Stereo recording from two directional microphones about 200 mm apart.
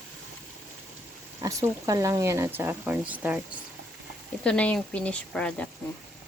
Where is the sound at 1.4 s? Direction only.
15° right (ahead or behind).